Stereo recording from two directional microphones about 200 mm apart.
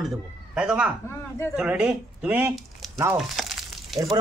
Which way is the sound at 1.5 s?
5° right (ahead or behind).